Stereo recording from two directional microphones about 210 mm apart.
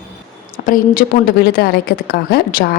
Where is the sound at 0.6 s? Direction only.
40° left (ahead or behind).